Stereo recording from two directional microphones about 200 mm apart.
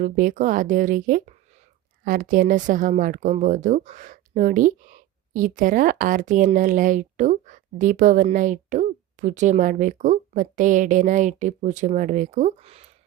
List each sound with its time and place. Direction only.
0.0 s speech: 40° right (ahead or behind)